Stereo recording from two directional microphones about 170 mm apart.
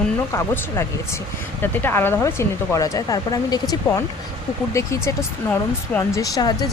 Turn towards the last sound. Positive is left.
turn(degrees=20)  # may be behind; listen again after turning